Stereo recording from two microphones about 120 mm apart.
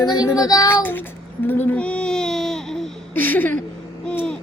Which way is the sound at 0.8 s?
15° left (ahead or behind).